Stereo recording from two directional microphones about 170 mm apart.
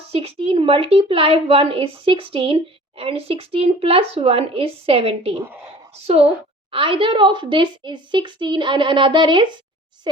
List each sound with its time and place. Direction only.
0.1 s a woman's voice: 35° right (ahead or behind)